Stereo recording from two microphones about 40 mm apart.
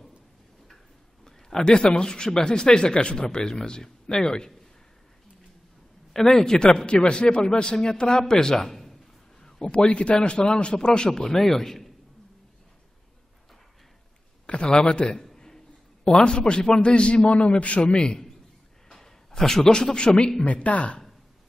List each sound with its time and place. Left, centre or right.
1.2 s speech: centre
6.1 s a man's voice: centre
9.4 s a man's voice: centre
14.4 s a man's voice: left
15.0 s a sound: centre
16.2 s speech: left
17.9 s a man's voice: left
20.4 s speech: left